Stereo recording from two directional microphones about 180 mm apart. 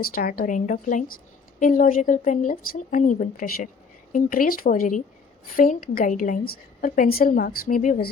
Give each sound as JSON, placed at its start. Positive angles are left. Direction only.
{"t": 0.0, "sound": "a woman's voice", "side_deg": 55}